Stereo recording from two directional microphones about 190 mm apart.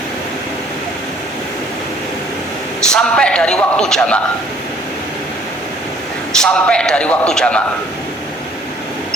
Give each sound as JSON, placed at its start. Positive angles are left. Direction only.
{"t": 2.9, "sound": "speech", "side_deg": 5}
{"t": 6.4, "sound": "speech", "side_deg": 5}